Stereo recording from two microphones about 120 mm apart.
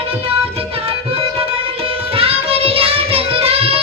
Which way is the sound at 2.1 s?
55° right (ahead or behind).